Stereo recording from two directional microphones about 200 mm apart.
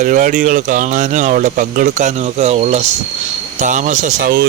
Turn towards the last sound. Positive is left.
turn(degrees=-45)  # may be behind; listen again after turning